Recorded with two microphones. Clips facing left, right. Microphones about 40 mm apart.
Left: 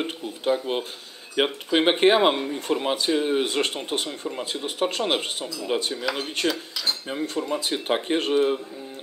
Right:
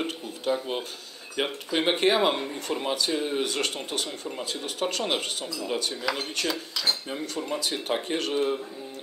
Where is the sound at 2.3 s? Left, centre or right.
Centre; by 3.8 s left.